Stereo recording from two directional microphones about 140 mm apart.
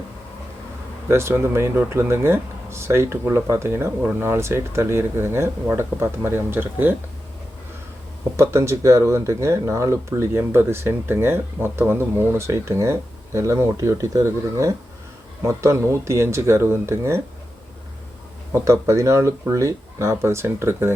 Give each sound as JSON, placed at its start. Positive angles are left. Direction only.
{"t": 1.0, "sound": "speech", "side_deg": -20}
{"t": 8.4, "sound": "speech", "side_deg": -20}
{"t": 18.5, "sound": "speech", "side_deg": -20}